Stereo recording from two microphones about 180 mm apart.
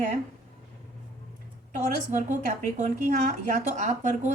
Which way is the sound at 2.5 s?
40° right (ahead or behind).